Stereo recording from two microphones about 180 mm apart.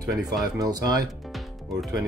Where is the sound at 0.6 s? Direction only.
20° right (ahead or behind).